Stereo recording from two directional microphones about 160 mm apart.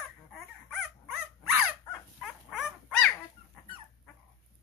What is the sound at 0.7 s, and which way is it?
Dog, 5° right (ahead or behind).